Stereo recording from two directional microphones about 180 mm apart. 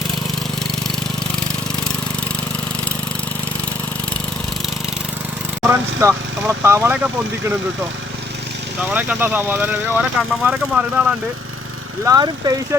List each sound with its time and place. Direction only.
5.6 s speech: 15° right (ahead or behind)
8.9 s speech: 10° right (ahead or behind)
12.0 s speech: 20° right (ahead or behind)